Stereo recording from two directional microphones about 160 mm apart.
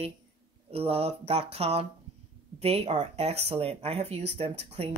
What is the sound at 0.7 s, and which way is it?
Speech, 40° right (ahead or behind).